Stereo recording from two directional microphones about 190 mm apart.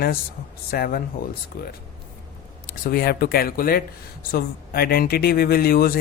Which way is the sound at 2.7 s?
50° left (ahead or behind).